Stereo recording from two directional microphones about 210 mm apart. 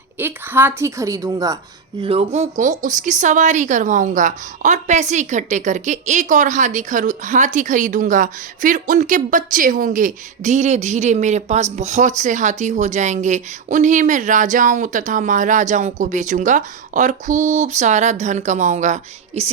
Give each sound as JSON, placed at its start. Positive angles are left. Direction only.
{"t": 0.2, "sound": "a woman's voice", "side_deg": -10}
{"t": 2.0, "sound": "speech", "side_deg": -30}